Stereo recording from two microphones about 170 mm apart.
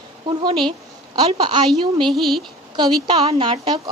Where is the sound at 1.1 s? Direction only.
30° right (ahead or behind).